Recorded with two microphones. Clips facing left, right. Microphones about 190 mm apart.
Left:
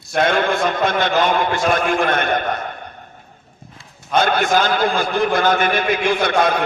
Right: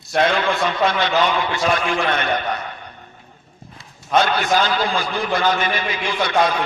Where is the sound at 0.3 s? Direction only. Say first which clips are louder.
Left 2 dB; 50° left (ahead or behind).